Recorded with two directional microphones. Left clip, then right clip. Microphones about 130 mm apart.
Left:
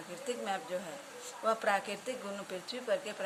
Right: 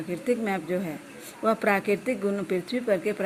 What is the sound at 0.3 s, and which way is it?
Speech, 45° right (ahead or behind).